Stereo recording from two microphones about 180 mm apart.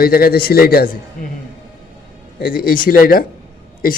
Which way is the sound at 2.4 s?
55° left (ahead or behind).